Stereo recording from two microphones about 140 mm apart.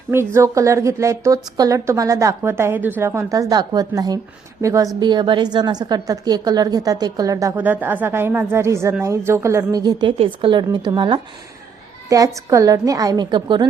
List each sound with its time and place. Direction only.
0.3 s a woman's voice: 20° right (ahead or behind)
4.9 s a woman's voice: 30° right (ahead or behind)
12.0 s a woman's voice: 25° right (ahead or behind)